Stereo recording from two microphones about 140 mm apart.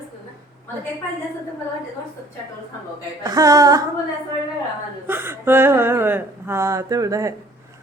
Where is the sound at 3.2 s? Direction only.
25° right (ahead or behind).